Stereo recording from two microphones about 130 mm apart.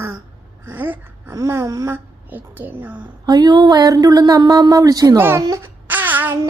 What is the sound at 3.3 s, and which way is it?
Speech, 30° right (ahead or behind).